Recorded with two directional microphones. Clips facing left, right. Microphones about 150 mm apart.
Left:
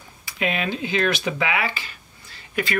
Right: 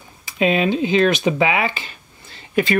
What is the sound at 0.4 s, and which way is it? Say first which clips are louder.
Speech: right 8 dB; 25° right (ahead or behind).